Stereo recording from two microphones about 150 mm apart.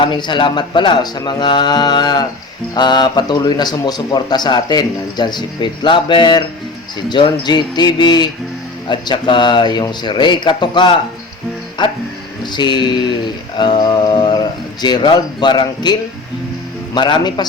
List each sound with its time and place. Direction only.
0.0 s a man's voice: 30° left (ahead or behind)